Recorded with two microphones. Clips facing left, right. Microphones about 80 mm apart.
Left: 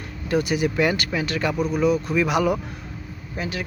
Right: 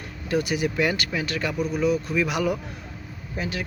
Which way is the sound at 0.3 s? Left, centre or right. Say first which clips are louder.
Left 2 dB; left.